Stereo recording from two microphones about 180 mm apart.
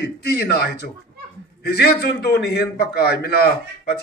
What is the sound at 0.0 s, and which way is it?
A man's voice, 60° left (ahead or behind).